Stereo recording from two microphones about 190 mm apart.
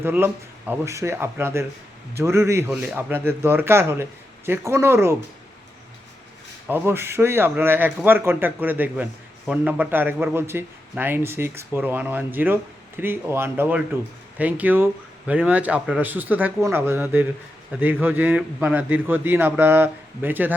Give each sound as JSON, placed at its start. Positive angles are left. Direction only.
{"t": 0.0, "sound": "speech", "side_deg": -10}
{"t": 6.7, "sound": "speech", "side_deg": -10}